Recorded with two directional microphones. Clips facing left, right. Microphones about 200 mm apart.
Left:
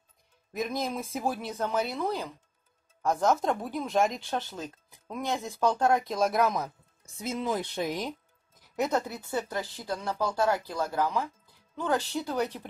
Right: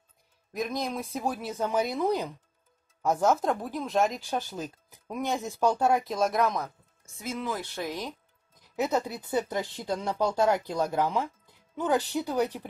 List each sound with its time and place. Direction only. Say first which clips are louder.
0.5 s speech: even; centre (ahead or behind)
7.2 s speech: left 2 dB; 20° left (ahead or behind)
8.7 s speech: right 1 dB; 5° right (ahead or behind)